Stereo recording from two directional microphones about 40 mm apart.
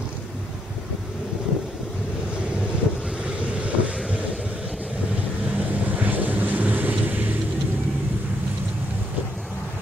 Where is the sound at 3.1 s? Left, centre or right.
Right.